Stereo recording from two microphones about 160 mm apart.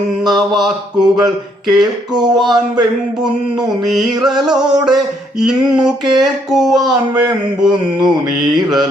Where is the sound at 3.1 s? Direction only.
5° right (ahead or behind).